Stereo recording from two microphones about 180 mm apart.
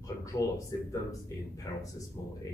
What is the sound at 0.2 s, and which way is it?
Speech, 20° left (ahead or behind).